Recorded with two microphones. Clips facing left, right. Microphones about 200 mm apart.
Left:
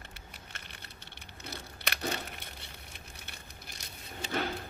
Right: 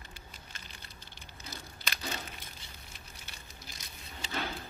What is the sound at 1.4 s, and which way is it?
Crumpling, 65° left (ahead or behind).